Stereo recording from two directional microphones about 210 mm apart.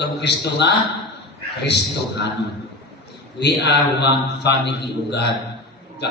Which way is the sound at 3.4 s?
55° left (ahead or behind).